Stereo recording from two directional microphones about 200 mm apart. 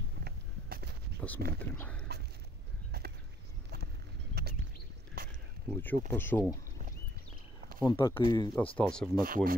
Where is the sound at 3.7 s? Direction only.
50° right (ahead or behind).